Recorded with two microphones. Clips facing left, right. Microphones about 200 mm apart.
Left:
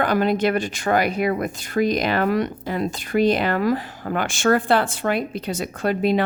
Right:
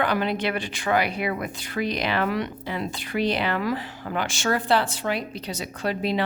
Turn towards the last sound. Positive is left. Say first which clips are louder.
# left 5 dB
turn(degrees=50)  # may be behind; listen again after turning